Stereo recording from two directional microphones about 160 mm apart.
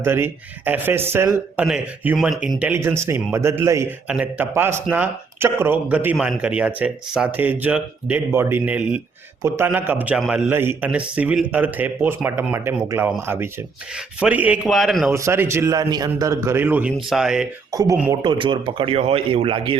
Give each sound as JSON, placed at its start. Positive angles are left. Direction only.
{"t": 0.0, "sound": "speech", "side_deg": -15}
{"t": 1.6, "sound": "speech", "side_deg": -5}
{"t": 14.6, "sound": "speech", "side_deg": 0}
{"t": 15.1, "sound": "speech", "side_deg": -15}
{"t": 17.7, "sound": "speech", "side_deg": -20}